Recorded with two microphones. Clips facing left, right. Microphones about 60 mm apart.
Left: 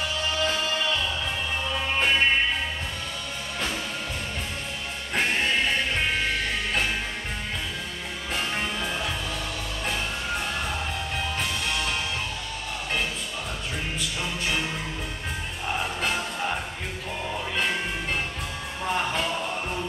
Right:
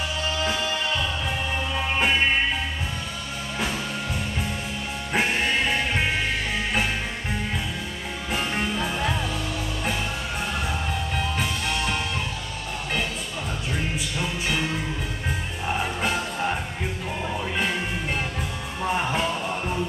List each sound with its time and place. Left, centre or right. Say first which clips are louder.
0.4 s music: even; centre
5.1 s music: right 1 dB; centre
8.3 s music: right 2 dB; centre
14.1 s music: right 1 dB; centre
18.8 s music: right 2 dB; centre